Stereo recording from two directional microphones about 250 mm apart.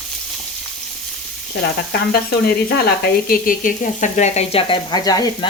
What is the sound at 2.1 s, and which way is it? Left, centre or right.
Speech, left.